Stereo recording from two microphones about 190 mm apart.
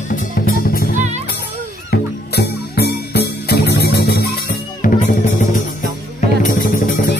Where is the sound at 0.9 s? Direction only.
40° right (ahead or behind).